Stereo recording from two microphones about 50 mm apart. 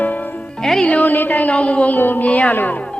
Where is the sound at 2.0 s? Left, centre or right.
Left.